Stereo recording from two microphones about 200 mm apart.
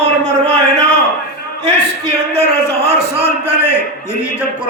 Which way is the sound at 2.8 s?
30° right (ahead or behind).